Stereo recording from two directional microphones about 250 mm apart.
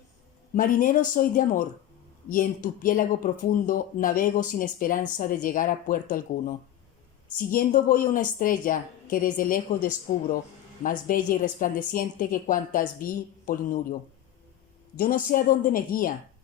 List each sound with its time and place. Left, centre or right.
0.5 s speech: left
14.9 s speech: left